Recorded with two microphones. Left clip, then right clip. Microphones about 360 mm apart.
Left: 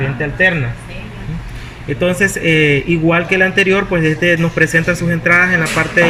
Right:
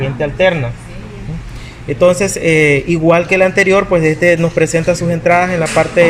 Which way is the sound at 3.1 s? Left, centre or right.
Centre.